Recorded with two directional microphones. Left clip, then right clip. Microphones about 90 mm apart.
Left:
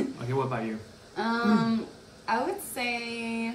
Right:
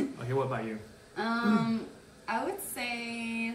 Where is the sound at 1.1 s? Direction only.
35° left (ahead or behind).